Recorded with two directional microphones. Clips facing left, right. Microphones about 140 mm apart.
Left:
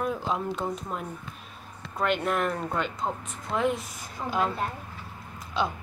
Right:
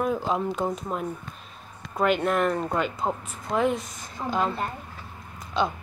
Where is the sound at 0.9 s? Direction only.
40° right (ahead or behind).